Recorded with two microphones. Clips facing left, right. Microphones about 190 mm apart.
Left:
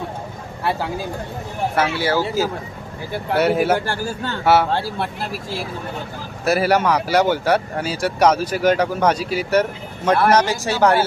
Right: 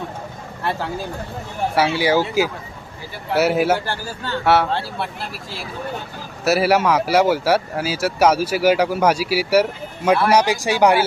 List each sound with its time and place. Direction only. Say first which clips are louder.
0.6 s speech: left 2 dB; 10° left (ahead or behind)
1.7 s speech: right 3 dB; 10° right (ahead or behind)
3.3 s speech: even; 5° right (ahead or behind)
3.8 s speech: left 3 dB; 50° left (ahead or behind)
6.4 s speech: right 1 dB; 5° right (ahead or behind)